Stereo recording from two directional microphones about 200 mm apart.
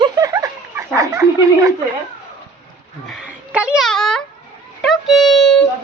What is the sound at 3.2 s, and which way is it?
A child's voice, 5° right (ahead or behind).